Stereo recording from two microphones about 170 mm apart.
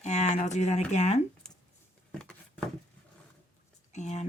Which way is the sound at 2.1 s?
5° left (ahead or behind).